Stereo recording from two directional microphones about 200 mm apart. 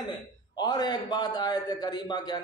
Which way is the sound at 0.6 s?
20° left (ahead or behind).